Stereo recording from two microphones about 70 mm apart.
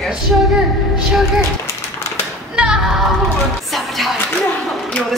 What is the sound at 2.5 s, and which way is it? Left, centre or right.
Music, centre.